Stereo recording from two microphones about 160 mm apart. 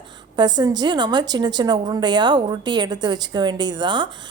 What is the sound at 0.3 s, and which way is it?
A woman's voice, 25° right (ahead or behind).